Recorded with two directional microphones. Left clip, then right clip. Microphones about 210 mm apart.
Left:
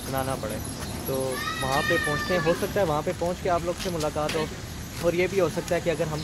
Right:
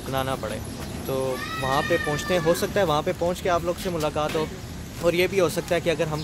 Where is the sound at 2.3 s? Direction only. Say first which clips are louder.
Right 6 dB; 15° right (ahead or behind).